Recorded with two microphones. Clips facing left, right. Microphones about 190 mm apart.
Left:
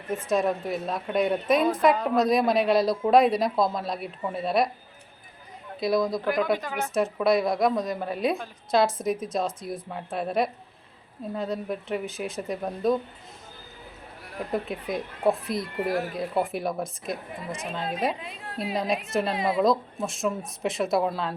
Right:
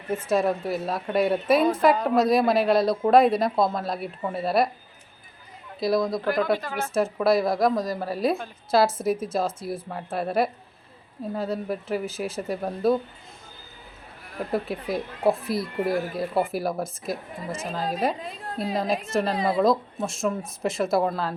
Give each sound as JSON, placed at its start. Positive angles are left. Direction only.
{"t": 0.3, "sound": "a woman's voice", "side_deg": 0}
{"t": 5.8, "sound": "a woman's voice", "side_deg": 0}
{"t": 6.2, "sound": "speech", "side_deg": 15}
{"t": 6.9, "sound": "a woman's voice", "side_deg": 0}
{"t": 14.5, "sound": "a woman's voice", "side_deg": -5}
{"t": 17.7, "sound": "a woman's voice", "side_deg": -35}
{"t": 18.5, "sound": "a woman's voice", "side_deg": 0}